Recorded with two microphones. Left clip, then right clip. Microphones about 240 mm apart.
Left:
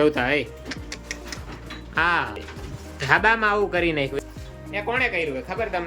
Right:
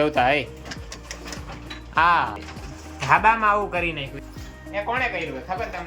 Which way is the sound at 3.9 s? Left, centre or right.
Centre.